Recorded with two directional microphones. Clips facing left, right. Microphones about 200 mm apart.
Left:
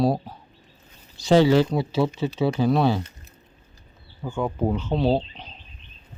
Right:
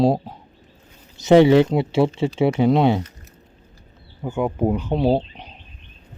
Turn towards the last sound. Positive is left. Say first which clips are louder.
# right 3 dB
turn(degrees=-15)  # may be behind; listen again after turning